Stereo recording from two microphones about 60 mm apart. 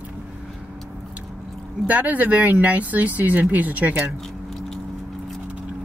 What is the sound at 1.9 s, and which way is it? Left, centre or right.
Speech, right.